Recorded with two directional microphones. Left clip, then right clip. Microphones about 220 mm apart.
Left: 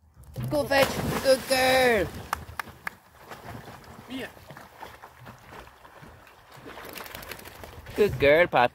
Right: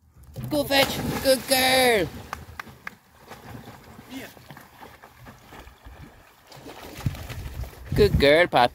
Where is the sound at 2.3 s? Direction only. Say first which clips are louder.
Left 4 dB; 55° left (ahead or behind).